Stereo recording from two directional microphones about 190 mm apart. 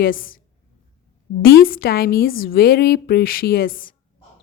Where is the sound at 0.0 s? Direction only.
45° left (ahead or behind).